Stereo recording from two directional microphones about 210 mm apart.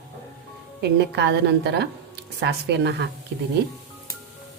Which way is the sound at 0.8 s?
55° right (ahead or behind).